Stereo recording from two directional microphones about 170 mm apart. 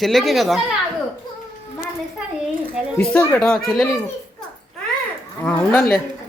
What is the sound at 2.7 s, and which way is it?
Speech, 5° left (ahead or behind).